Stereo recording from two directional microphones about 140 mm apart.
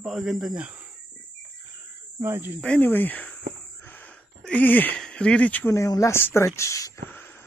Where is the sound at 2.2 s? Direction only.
15° right (ahead or behind).